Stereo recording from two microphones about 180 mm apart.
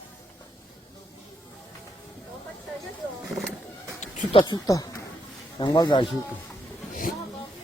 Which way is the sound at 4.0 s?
40° left (ahead or behind).